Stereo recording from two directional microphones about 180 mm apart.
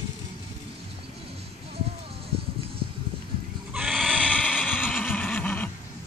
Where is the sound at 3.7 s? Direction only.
Centre (ahead or behind).